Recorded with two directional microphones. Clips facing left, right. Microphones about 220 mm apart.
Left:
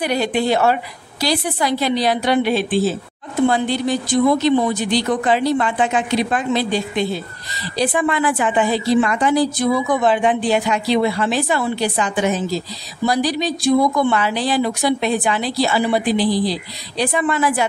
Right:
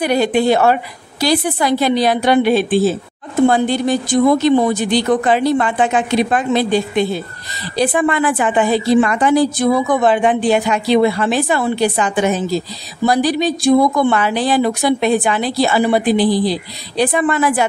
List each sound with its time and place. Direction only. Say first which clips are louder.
0.0 s a woman's voice: right 5 dB; 50° right (ahead or behind)